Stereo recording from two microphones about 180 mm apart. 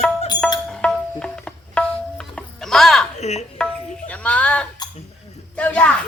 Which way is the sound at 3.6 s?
5° left (ahead or behind).